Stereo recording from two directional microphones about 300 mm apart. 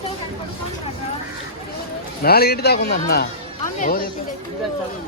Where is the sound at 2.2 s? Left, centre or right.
Left.